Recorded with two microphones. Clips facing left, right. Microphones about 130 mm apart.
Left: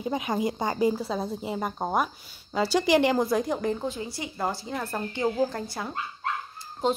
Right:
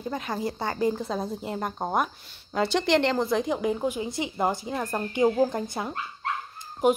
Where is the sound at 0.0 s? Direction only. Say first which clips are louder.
Left 3 dB; 10° left (ahead or behind).